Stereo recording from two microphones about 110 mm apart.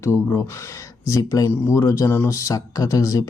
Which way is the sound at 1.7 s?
30° left (ahead or behind).